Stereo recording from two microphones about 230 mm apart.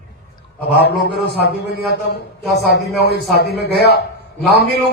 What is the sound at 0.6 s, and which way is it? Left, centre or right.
A man's voice, left.